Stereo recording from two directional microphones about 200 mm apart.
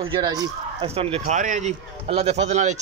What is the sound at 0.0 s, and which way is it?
Speech, 20° right (ahead or behind).